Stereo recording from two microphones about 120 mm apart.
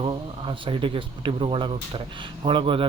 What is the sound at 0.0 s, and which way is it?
Speech, 45° right (ahead or behind).